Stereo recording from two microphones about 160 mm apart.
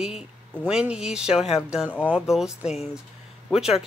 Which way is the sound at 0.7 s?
5° right (ahead or behind).